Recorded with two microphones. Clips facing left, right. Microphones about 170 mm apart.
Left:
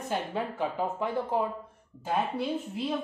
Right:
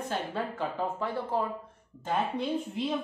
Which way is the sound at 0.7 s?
20° left (ahead or behind).